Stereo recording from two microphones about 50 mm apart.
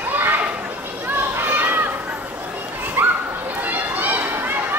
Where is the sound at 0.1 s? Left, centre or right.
Right.